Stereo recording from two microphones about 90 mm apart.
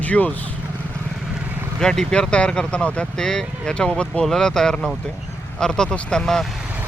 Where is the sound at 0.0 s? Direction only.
15° left (ahead or behind).